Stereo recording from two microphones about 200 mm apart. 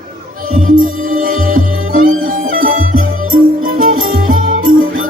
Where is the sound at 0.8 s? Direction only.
45° right (ahead or behind).